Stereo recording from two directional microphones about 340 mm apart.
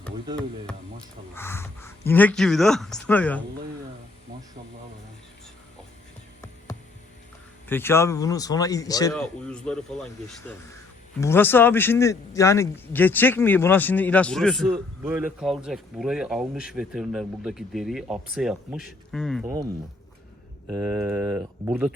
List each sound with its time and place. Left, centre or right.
0.3 s a man's voice: centre
7.7 s a man's voice: centre
20.7 s a man's voice: centre